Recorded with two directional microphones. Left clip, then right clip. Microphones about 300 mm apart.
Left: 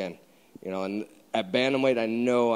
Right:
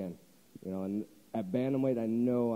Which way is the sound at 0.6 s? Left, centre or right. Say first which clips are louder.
Left 7 dB; centre.